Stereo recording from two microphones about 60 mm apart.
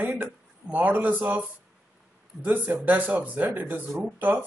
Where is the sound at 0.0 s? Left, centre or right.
Right.